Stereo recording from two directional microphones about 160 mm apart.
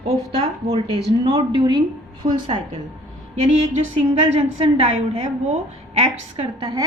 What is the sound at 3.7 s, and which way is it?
A woman's voice, 40° right (ahead or behind).